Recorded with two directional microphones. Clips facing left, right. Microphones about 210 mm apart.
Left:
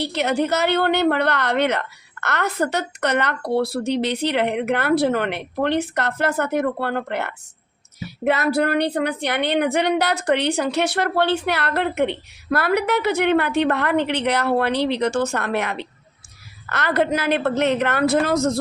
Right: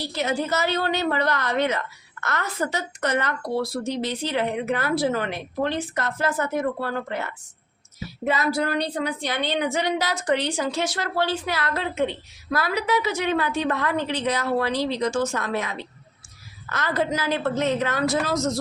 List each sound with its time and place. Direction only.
0.0 s a woman's voice: 65° left (ahead or behind)